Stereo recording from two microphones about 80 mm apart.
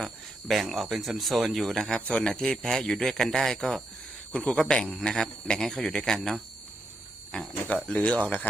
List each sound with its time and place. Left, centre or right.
0.0 s speech: centre
7.3 s a sound: centre
7.9 s speech: centre